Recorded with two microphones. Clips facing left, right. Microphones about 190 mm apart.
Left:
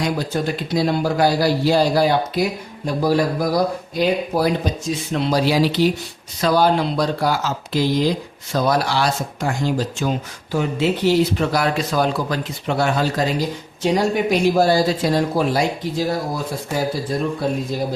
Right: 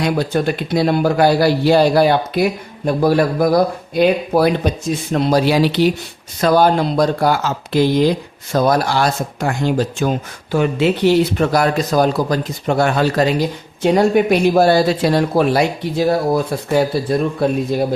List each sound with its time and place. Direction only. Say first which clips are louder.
0.0 s a man's voice: right 4 dB; 65° right (ahead or behind)
6.4 s speech: right 3 dB; 50° right (ahead or behind)
8.5 s a man's voice: right 4 dB; 50° right (ahead or behind); by 17.6 s 65° right (ahead or behind)